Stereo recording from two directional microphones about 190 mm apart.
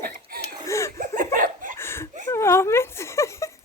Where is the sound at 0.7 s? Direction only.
15° left (ahead or behind).